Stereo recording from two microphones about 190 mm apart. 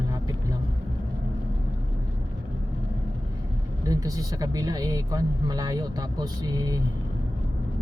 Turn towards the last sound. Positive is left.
turn(degrees=-20)  # may be behind; listen again after turning